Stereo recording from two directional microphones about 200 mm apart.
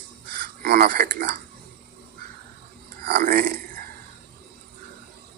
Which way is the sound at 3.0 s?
50° right (ahead or behind).